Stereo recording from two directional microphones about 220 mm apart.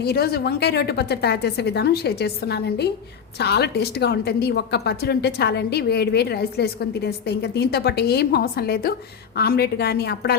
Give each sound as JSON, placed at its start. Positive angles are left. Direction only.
{"t": 0.0, "sound": "a woman's voice", "side_deg": 45}